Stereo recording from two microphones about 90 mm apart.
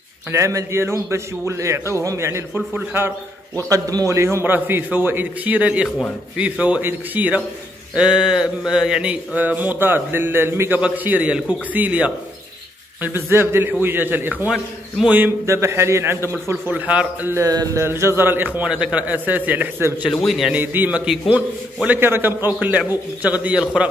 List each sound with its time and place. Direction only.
0.3 s a man's voice: 35° right (ahead or behind)
3.6 s a man's voice: 40° right (ahead or behind); by 14.5 s 20° right (ahead or behind)
14.5 s speech: 10° right (ahead or behind)
15.4 s a man's voice: 30° right (ahead or behind); by 17.3 s 15° right (ahead or behind)
17.7 s a man's voice: 30° right (ahead or behind)
18.6 s speech: 10° right (ahead or behind)
20.2 s a man's voice: centre (ahead or behind)
20.5 s a man's voice: 20° right (ahead or behind)
21.1 s a man's voice: 5° right (ahead or behind)
21.8 s a man's voice: 25° right (ahead or behind)
23.6 s a man's voice: 5° right (ahead or behind)